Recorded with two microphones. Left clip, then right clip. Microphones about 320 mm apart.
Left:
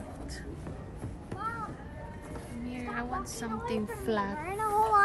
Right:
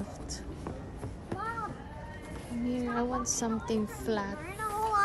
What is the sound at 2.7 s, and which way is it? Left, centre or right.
A woman's voice, centre.